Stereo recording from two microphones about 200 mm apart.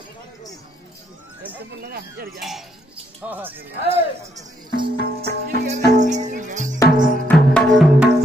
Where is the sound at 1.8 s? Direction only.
50° right (ahead or behind).